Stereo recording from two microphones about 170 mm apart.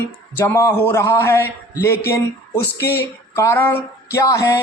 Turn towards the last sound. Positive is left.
turn(degrees=15)  # may be behind; listen again after turning